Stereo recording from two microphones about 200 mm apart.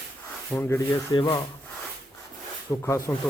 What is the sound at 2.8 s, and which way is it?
Speech, 10° left (ahead or behind).